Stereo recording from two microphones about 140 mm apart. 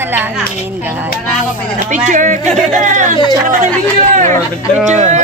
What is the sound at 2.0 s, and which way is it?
Speech, 65° right (ahead or behind).